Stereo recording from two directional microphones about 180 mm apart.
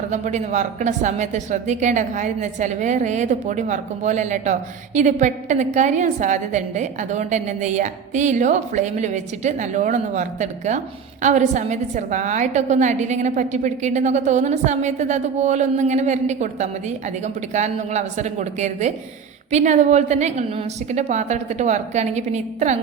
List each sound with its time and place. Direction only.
0.1 s a woman's voice: 40° right (ahead or behind)